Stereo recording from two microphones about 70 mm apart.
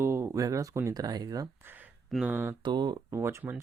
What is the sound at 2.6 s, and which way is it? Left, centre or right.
Speech, right.